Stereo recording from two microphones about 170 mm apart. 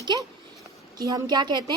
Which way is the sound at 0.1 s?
25° right (ahead or behind).